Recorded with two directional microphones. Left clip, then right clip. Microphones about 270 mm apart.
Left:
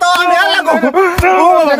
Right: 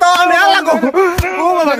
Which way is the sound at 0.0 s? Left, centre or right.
Centre.